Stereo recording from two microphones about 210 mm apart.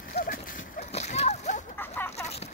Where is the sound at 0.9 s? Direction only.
30° left (ahead or behind).